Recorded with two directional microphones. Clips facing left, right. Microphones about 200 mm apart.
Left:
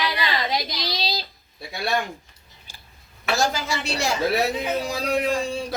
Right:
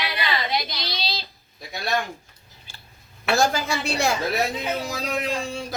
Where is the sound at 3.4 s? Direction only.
55° right (ahead or behind).